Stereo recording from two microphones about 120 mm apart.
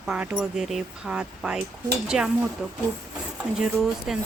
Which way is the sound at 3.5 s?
5° right (ahead or behind).